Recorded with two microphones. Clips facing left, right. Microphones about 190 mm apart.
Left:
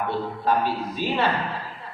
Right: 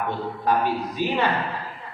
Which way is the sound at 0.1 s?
15° right (ahead or behind).